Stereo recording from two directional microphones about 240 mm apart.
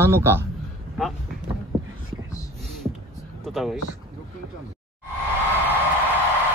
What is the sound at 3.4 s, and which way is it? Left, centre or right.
Speech, centre.